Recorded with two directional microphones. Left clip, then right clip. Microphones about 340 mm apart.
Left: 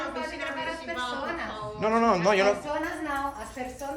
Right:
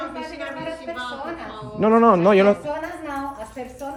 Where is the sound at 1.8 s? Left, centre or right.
Centre.